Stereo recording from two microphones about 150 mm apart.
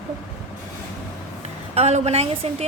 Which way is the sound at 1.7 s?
45° right (ahead or behind).